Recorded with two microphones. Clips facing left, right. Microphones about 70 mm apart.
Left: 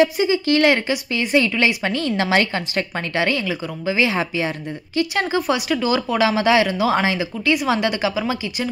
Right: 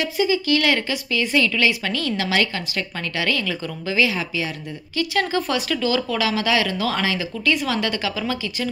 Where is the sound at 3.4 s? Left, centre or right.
Centre.